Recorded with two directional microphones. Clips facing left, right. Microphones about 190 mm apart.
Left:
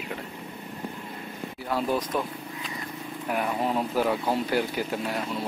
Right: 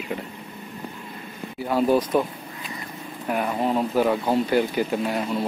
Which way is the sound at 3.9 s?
5° left (ahead or behind).